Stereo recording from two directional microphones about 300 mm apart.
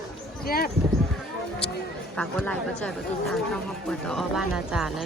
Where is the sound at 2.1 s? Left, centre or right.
Centre.